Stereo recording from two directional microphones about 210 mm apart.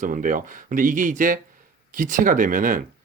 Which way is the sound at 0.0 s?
40° right (ahead or behind).